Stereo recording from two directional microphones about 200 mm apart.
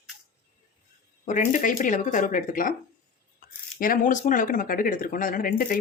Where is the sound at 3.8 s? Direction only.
40° left (ahead or behind).